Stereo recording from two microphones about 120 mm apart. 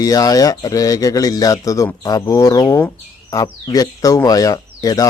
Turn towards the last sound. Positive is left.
turn(degrees=30)  # may be behind; listen again after turning